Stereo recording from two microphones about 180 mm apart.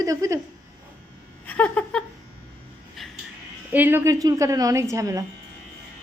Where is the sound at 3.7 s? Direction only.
10° right (ahead or behind).